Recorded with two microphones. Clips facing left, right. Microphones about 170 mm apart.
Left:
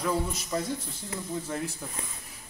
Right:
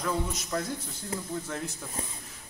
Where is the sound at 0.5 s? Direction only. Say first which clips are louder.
Left 1 dB; 15° left (ahead or behind).